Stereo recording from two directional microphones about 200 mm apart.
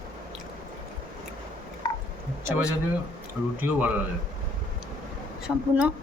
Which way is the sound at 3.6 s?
10° right (ahead or behind).